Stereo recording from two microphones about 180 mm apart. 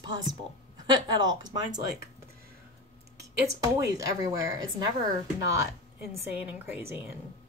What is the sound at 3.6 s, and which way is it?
Speech, 20° right (ahead or behind).